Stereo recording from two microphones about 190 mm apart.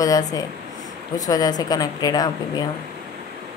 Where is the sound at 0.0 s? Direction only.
20° left (ahead or behind).